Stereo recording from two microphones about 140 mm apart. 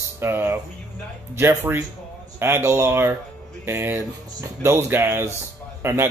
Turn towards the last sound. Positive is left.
turn(degrees=-20)  # may be behind; listen again after turning